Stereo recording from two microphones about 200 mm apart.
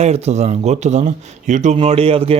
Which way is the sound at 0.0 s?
35° right (ahead or behind).